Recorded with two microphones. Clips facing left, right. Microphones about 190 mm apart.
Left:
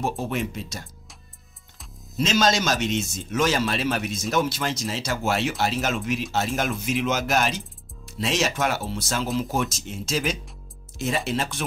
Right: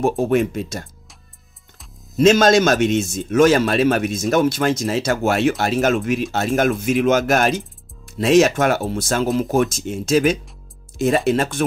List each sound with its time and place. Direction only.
0.0 s a man's voice: 50° right (ahead or behind)
2.1 s a man's voice: 55° right (ahead or behind)